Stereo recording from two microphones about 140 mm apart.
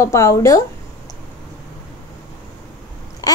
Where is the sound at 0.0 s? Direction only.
20° left (ahead or behind).